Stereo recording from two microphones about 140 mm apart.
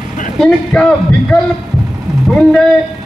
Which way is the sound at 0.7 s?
5° left (ahead or behind).